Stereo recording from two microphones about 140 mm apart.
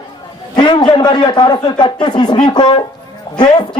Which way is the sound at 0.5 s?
30° left (ahead or behind).